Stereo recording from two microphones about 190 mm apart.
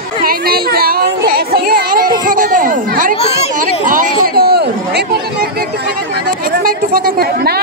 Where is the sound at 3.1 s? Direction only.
35° left (ahead or behind).